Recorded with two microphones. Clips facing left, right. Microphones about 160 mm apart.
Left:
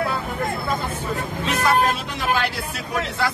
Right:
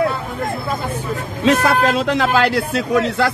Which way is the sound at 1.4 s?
90° right.